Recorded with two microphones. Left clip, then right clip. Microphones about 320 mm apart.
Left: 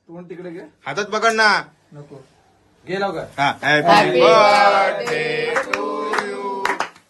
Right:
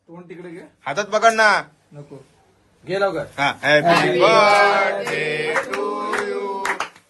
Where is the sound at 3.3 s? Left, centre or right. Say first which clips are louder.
Left 1 dB; centre.